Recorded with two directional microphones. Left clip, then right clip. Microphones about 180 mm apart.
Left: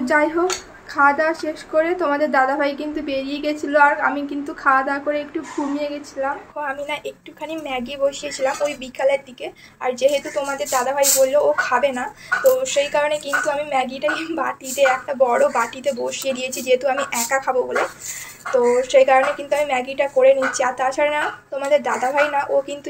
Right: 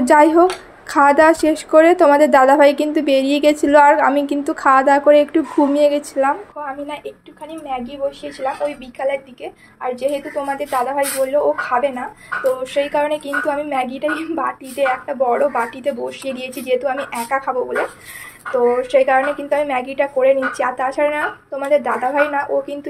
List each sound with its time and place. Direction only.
0.0 s a woman's voice: 40° right (ahead or behind)
7.6 s a woman's voice: 5° left (ahead or behind)
18.5 s a woman's voice: 15° right (ahead or behind)